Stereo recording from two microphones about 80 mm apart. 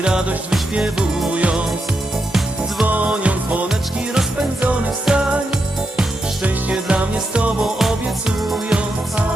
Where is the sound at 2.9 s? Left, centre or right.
Centre.